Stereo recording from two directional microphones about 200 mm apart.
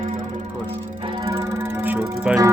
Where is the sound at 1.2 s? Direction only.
15° right (ahead or behind).